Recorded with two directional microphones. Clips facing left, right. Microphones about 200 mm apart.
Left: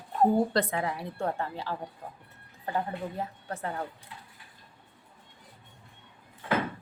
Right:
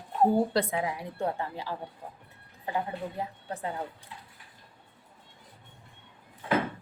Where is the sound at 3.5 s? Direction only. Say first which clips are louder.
Right 1 dB; 15° right (ahead or behind).